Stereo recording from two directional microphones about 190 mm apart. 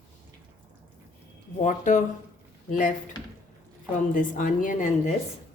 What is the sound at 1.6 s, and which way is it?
Speech, 40° left (ahead or behind).